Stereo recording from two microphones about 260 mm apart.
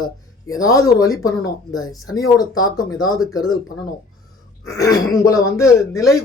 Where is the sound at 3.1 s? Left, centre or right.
Left.